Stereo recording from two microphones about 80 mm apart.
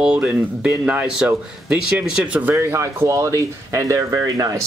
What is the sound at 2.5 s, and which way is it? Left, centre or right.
Speech, right.